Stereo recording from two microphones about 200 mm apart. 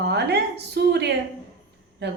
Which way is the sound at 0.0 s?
55° right (ahead or behind).